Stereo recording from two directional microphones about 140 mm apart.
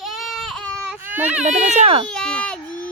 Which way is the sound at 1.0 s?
15° right (ahead or behind).